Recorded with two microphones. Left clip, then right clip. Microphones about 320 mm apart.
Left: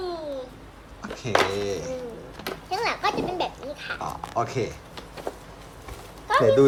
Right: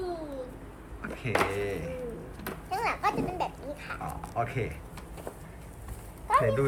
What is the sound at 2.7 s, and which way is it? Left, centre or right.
A child's voice, left.